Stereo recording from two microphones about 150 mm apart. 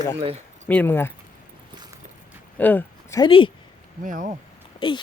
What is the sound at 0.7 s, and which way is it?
Speech, 10° left (ahead or behind).